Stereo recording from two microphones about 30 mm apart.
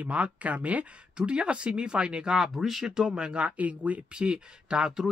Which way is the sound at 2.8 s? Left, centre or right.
Right.